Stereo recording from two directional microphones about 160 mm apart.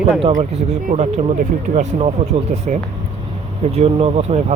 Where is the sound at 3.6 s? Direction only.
40° right (ahead or behind).